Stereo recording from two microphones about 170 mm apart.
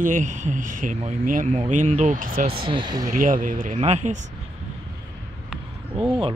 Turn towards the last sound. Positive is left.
turn(degrees=-5)  # may be behind; listen again after turning